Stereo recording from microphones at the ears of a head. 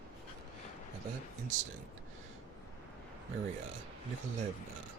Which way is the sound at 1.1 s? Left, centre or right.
Right.